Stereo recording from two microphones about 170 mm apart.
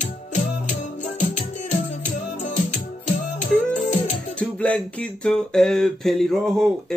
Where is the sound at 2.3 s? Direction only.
45° left (ahead or behind).